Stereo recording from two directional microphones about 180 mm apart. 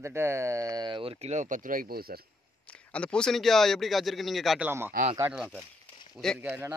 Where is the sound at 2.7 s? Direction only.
5° left (ahead or behind).